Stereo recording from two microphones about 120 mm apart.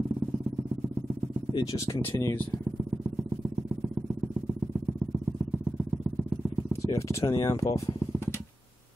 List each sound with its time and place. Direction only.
1.5 s speech: 30° left (ahead or behind)
6.7 s speech: 25° left (ahead or behind)